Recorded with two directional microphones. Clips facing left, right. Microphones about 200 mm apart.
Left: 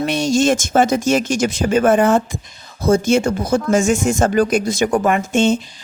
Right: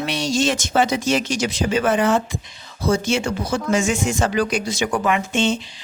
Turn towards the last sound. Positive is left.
turn(degrees=45)  # may be behind; listen again after turning